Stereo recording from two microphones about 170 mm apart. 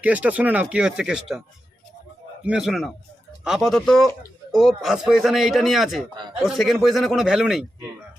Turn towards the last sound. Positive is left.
turn(degrees=-5)  # may be behind; listen again after turning